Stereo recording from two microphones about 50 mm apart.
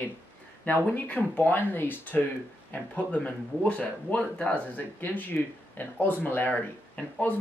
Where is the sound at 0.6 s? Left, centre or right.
Left.